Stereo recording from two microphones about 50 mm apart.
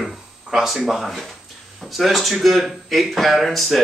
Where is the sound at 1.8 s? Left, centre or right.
Centre.